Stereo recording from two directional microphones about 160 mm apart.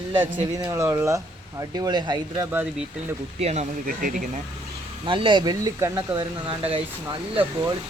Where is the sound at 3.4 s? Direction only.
45° right (ahead or behind).